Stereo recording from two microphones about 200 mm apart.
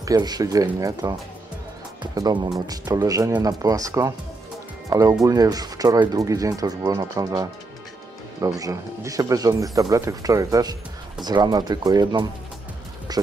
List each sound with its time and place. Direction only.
0.0 s speech: 20° right (ahead or behind)
2.1 s speech: 20° right (ahead or behind)
13.1 s a sound: 20° right (ahead or behind)